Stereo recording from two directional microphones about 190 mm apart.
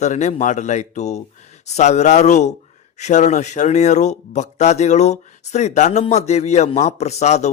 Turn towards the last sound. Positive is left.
turn(degrees=35)  # may be behind; listen again after turning